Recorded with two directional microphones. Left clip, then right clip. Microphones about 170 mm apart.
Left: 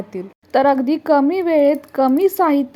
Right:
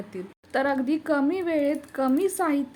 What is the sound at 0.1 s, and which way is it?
Speech, 35° left (ahead or behind).